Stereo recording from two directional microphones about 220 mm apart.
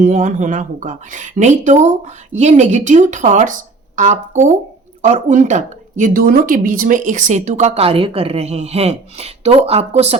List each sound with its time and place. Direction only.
0.0 s a woman's voice: 35° right (ahead or behind)